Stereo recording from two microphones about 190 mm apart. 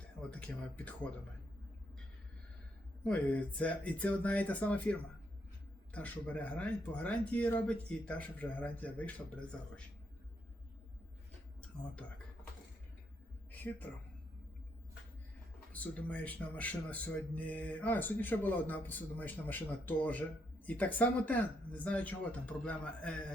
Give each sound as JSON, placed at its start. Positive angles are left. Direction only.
{"t": 0.2, "sound": "speech", "side_deg": 5}
{"t": 3.0, "sound": "speech", "side_deg": 5}
{"t": 13.5, "sound": "a sound", "side_deg": 10}
{"t": 15.7, "sound": "speech", "side_deg": 10}